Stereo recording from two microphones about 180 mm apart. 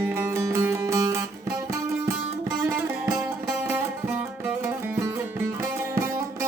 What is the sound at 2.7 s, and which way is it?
Music, 15° right (ahead or behind).